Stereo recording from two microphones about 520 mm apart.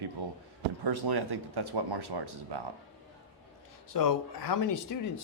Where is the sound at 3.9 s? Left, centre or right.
Left.